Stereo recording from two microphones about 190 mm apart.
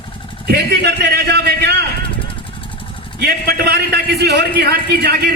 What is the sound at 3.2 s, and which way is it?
A man's voice, 55° right (ahead or behind).